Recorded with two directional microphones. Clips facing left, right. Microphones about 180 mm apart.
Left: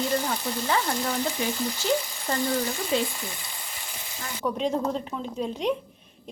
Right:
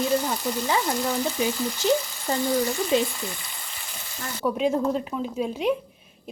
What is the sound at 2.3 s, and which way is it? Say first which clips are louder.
Speech: right 2 dB; 10° right (ahead or behind).